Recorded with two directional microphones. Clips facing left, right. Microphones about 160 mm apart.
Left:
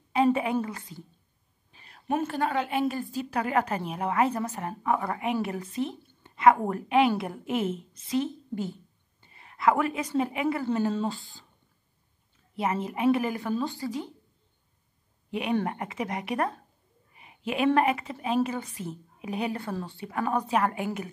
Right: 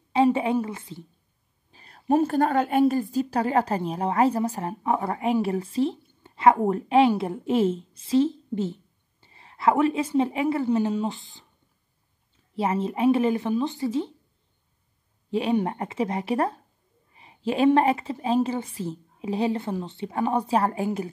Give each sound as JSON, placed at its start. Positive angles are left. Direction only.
{"t": 0.1, "sound": "a sound", "side_deg": -25}
{"t": 0.7, "sound": "a woman's voice", "side_deg": -25}
{"t": 1.7, "sound": "a woman's voice", "side_deg": -35}
{"t": 10.7, "sound": "a woman's voice", "side_deg": -15}
{"t": 12.5, "sound": "a woman's voice", "side_deg": -30}
{"t": 15.6, "sound": "a woman's voice", "side_deg": -30}
{"t": 17.1, "sound": "a sound", "side_deg": -30}
{"t": 17.7, "sound": "a woman's voice", "side_deg": -30}